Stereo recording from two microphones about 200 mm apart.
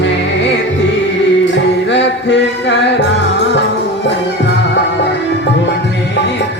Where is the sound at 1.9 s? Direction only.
60° left (ahead or behind).